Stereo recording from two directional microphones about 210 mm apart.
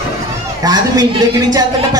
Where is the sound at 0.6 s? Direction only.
20° right (ahead or behind).